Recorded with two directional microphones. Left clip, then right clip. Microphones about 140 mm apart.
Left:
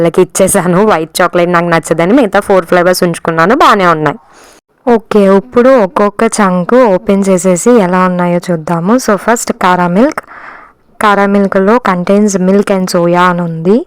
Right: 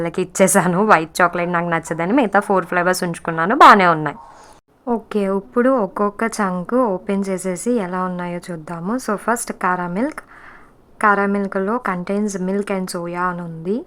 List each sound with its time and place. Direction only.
0.0 s a woman's voice: 45° left (ahead or behind)
5.6 s speech: 20° left (ahead or behind)
6.1 s a woman's voice: 40° left (ahead or behind)